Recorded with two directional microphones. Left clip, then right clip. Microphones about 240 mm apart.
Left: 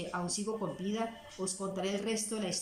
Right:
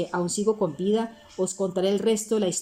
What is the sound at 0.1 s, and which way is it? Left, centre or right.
A woman's voice, right.